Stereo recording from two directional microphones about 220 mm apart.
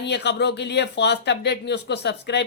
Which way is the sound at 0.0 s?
50° left (ahead or behind).